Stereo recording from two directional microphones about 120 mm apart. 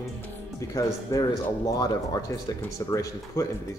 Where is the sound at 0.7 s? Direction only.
30° left (ahead or behind).